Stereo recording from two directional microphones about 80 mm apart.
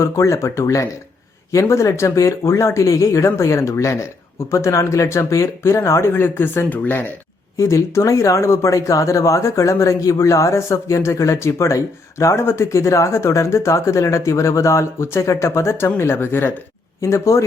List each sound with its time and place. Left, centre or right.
0.0 s speech: left
7.5 s speech: left